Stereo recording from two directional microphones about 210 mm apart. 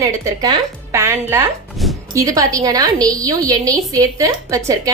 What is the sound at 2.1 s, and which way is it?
A woman's voice, 15° right (ahead or behind).